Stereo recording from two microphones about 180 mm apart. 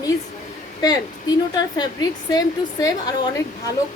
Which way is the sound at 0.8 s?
20° left (ahead or behind).